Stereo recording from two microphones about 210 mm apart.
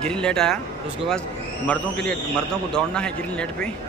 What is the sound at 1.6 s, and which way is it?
A man's voice, 5° left (ahead or behind).